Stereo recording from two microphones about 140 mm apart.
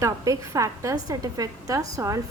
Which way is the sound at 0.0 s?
25° right (ahead or behind).